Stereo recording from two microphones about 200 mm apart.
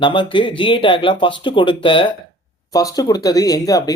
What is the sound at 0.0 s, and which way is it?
Speech, 25° left (ahead or behind).